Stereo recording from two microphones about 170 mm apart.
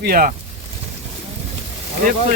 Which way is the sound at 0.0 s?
55° right (ahead or behind).